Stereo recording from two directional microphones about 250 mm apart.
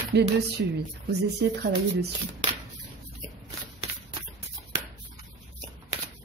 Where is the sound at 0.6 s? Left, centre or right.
Right.